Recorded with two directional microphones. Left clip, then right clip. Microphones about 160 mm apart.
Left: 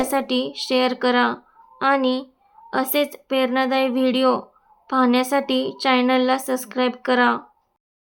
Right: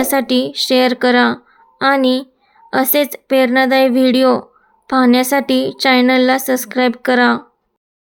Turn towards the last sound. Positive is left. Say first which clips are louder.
# right 5 dB
turn(degrees=-25)  # may be behind; listen again after turning